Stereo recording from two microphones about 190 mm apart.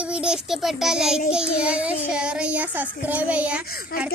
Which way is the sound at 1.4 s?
5° right (ahead or behind).